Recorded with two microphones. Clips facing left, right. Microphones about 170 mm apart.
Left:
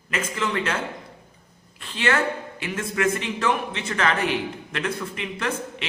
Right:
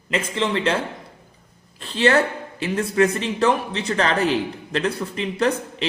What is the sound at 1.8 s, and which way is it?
A man's voice, 35° right (ahead or behind).